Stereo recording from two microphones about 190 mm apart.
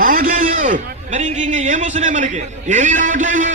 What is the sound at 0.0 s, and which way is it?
A man's voice, 45° right (ahead or behind).